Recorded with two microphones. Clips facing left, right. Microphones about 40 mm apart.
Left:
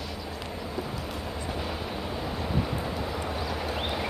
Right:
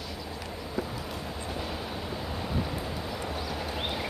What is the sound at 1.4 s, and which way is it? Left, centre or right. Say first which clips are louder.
Vehicle: left 2 dB; centre.